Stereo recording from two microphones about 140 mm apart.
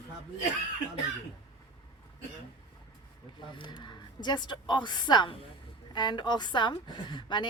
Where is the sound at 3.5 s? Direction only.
35° left (ahead or behind).